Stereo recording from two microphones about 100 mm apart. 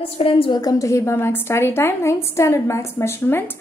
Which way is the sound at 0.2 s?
65° left (ahead or behind).